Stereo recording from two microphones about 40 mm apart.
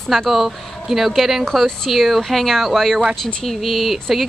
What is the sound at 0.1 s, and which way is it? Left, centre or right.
Speech, centre.